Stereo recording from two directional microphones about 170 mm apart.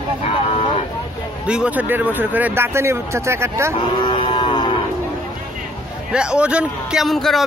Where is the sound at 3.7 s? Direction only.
30° left (ahead or behind).